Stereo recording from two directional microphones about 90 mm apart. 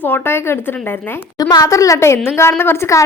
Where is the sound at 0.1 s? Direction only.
25° left (ahead or behind).